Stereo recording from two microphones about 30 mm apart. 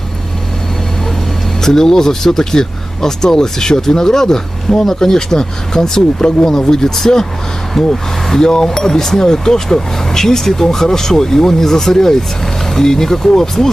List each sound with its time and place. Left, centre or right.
1.6 s speech: centre